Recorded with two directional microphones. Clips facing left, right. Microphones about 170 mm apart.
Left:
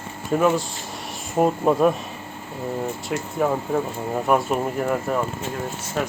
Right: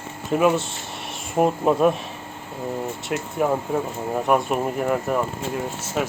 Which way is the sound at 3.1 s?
5° right (ahead or behind).